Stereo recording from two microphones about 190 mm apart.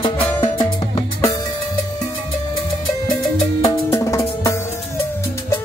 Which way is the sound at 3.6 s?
15° left (ahead or behind).